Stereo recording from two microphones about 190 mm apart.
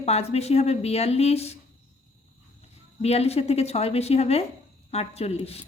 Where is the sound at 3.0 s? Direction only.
35° left (ahead or behind).